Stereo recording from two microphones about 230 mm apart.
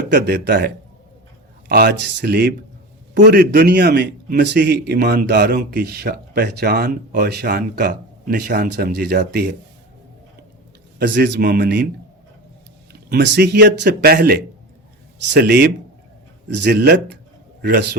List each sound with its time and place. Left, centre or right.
0.1 s a man's voice: right
11.0 s a man's voice: right
12.9 s a man's voice: right